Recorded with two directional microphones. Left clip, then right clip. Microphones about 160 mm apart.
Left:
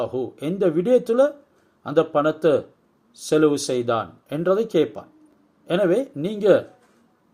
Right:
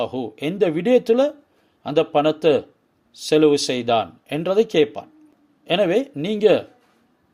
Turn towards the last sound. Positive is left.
turn(degrees=-30)  # may be behind; listen again after turning